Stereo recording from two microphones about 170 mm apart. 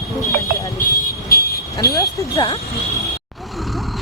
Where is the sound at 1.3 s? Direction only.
60° left (ahead or behind).